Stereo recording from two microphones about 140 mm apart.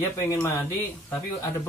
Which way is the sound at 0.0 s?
20° left (ahead or behind).